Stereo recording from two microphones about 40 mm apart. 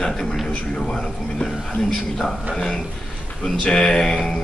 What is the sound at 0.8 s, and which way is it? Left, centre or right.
Speech, left.